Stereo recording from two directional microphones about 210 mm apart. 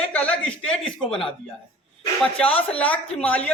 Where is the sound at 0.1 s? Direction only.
5° left (ahead or behind).